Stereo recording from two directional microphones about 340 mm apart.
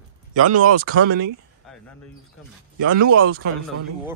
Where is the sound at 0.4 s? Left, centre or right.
Right.